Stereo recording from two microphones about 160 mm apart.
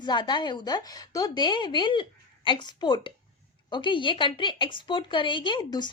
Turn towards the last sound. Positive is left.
turn(degrees=30)  # may be behind; listen again after turning